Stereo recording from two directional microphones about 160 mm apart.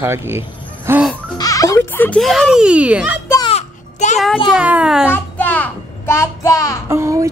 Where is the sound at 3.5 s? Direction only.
45° left (ahead or behind).